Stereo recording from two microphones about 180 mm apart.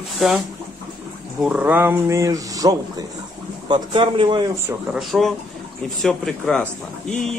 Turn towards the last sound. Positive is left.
turn(degrees=5)  # may be behind; listen again after turning